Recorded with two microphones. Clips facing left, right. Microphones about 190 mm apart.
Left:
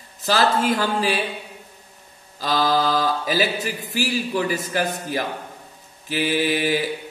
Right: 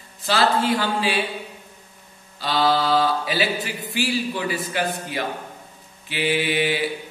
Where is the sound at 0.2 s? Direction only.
40° left (ahead or behind).